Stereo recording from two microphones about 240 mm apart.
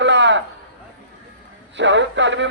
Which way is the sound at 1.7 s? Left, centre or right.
Right.